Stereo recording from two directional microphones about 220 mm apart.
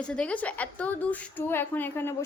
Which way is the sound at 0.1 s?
5° left (ahead or behind).